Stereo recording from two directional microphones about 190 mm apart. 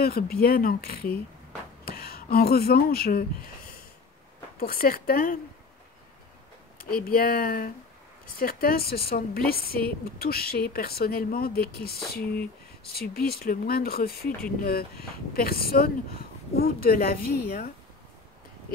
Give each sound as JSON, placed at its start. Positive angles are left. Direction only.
{"t": 0.0, "sound": "speech", "side_deg": 50}
{"t": 4.6, "sound": "speech", "side_deg": 50}
{"t": 6.9, "sound": "speech", "side_deg": 50}